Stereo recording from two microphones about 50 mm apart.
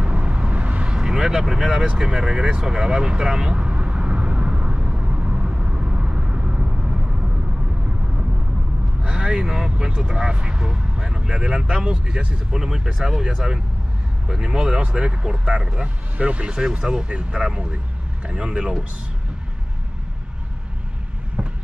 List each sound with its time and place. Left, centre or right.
0.0 s vehicle: right
9.0 s speech: centre